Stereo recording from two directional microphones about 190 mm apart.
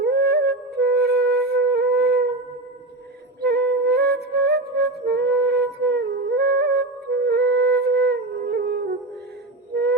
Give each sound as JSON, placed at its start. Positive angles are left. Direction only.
{"t": 0.0, "sound": "music", "side_deg": -55}
{"t": 3.4, "sound": "music", "side_deg": -55}